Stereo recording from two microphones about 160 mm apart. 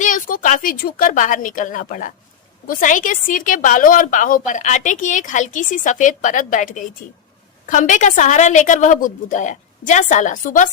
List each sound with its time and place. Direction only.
0.0 s a woman's voice: 55° left (ahead or behind)